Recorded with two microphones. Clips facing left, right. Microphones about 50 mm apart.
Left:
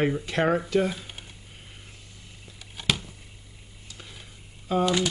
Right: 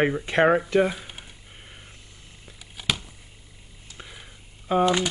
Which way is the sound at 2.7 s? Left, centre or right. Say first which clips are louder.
Left 1 dB; centre.